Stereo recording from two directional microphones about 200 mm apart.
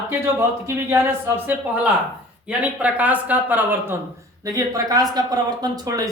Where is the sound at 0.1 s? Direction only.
15° right (ahead or behind).